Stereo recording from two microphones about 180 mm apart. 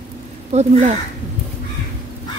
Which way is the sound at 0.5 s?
40° right (ahead or behind).